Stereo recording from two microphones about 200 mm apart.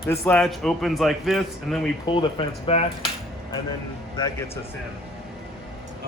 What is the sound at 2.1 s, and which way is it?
Speech, 20° left (ahead or behind).